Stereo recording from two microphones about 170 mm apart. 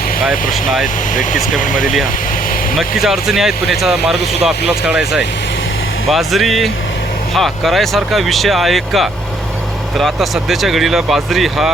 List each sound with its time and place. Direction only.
1.1 s speech: 50° left (ahead or behind)
2.7 s speech: 5° right (ahead or behind)